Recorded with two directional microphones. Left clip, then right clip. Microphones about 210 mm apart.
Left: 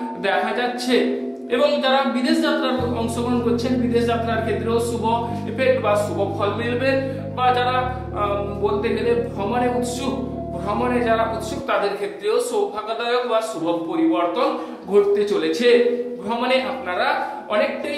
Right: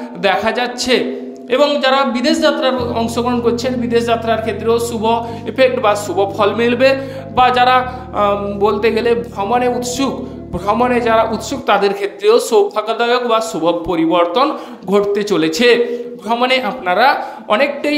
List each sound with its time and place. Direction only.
0.2 s speech: 45° right (ahead or behind)